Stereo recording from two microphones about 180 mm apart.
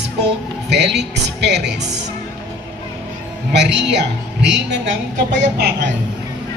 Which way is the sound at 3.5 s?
70° right (ahead or behind).